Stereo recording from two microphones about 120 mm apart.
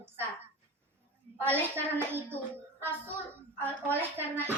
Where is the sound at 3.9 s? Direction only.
15° right (ahead or behind).